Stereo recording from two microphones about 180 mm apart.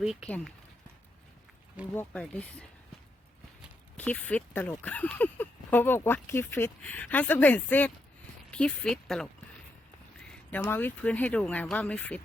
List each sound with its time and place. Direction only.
0.0 s speech: 5° right (ahead or behind)
0.3 s speech: 5° left (ahead or behind)
1.9 s speech: 10° left (ahead or behind)
3.9 s speech: 10° left (ahead or behind)